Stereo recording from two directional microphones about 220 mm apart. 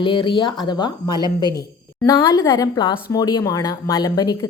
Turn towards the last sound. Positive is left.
turn(degrees=15)  # may be behind; listen again after turning